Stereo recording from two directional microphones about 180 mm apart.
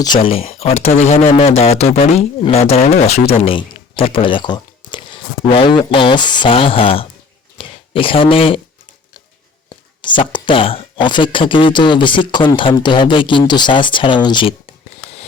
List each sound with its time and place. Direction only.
0.0 s speech: 25° left (ahead or behind)
7.6 s a sound: 30° left (ahead or behind)
9.6 s speech: 25° left (ahead or behind)